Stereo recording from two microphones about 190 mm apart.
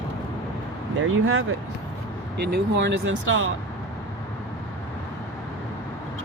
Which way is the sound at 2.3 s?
60° right (ahead or behind).